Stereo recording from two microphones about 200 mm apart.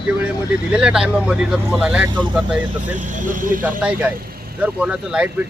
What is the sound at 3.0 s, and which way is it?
Speech, 40° right (ahead or behind).